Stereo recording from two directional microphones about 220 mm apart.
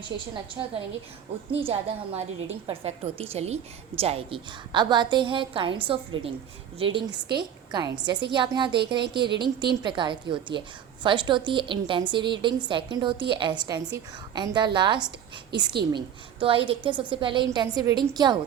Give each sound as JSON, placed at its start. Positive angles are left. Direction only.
{"t": 0.1, "sound": "a woman's voice", "side_deg": -20}